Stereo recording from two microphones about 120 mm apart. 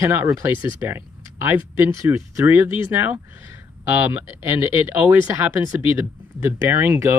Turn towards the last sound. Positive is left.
turn(degrees=-20)  # may be behind; listen again after turning